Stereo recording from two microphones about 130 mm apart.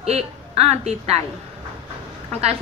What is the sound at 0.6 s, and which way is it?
Speech, 55° right (ahead or behind).